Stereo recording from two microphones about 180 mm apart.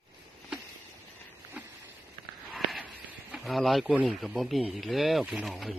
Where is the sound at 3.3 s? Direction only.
Centre (ahead or behind).